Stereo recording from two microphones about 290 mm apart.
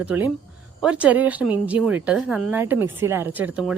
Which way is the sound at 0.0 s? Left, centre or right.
Centre.